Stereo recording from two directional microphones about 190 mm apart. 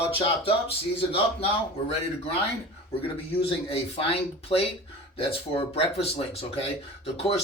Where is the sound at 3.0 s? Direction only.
30° left (ahead or behind).